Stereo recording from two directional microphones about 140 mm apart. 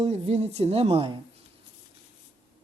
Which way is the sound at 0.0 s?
50° right (ahead or behind).